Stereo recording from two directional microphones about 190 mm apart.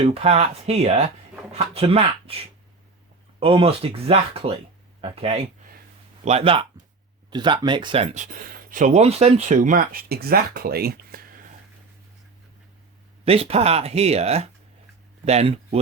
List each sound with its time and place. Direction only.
0.0 s speech: 30° right (ahead or behind)
3.4 s speech: 30° right (ahead or behind); by 11.2 s 55° right (ahead or behind)
13.2 s speech: 30° right (ahead or behind)